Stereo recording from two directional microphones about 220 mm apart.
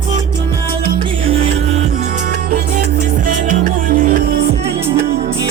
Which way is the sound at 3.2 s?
40° right (ahead or behind).